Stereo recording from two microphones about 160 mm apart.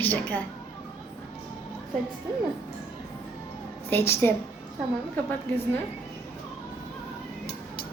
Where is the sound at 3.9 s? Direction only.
15° left (ahead or behind).